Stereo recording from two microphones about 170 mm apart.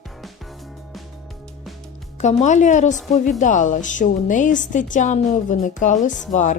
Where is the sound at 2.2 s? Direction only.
45° left (ahead or behind).